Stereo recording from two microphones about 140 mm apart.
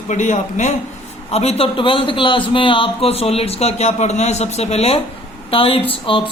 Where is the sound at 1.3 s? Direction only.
45° left (ahead or behind).